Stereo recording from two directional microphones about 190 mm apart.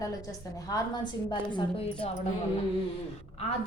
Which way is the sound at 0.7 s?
20° left (ahead or behind).